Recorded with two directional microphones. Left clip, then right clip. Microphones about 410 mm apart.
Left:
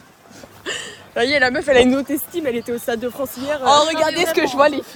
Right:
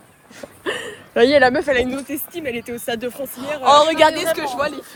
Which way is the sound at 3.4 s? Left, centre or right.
Centre.